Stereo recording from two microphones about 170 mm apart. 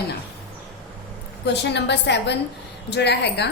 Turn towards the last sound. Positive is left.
turn(degrees=80)